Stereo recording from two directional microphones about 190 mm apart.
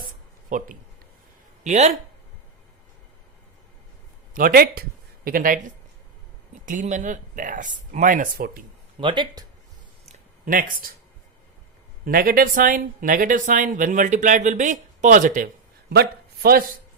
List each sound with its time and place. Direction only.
0.5 s speech: 45° right (ahead or behind)
4.4 s speech: 50° right (ahead or behind)
6.7 s speech: 40° right (ahead or behind)
9.0 s speech: 25° right (ahead or behind)
10.1 s a sound: 45° right (ahead or behind)
12.0 s speech: 50° right (ahead or behind)
15.9 s speech: 55° right (ahead or behind)